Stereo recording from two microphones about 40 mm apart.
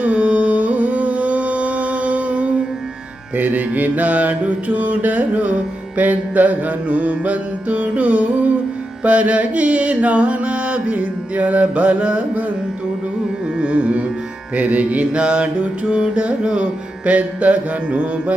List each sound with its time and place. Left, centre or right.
0.0 s music: right
9.0 s mantra: right
13.6 s carnatic music: right
14.5 s mantra: right